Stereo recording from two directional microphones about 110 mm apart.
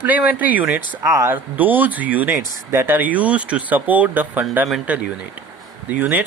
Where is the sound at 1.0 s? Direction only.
30° right (ahead or behind).